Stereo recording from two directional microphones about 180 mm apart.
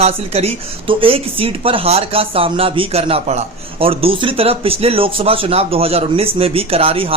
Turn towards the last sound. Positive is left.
turn(degrees=-30)  # may be behind; listen again after turning